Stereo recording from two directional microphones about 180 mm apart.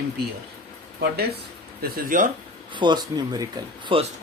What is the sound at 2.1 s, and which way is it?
Speech, 45° right (ahead or behind).